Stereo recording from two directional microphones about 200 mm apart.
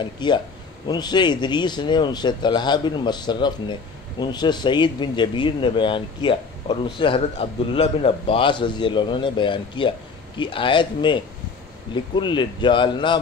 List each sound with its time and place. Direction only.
0.0 s speech: 20° left (ahead or behind)